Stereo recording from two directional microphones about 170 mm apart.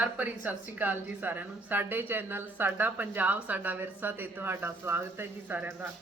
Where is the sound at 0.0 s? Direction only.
10° right (ahead or behind).